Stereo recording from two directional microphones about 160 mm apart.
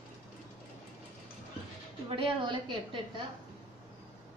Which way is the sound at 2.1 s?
35° right (ahead or behind).